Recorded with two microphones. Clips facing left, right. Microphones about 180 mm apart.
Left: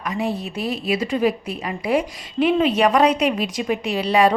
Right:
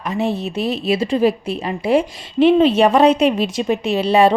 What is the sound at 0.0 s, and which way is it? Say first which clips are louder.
Speech: right 4 dB; 25° right (ahead or behind).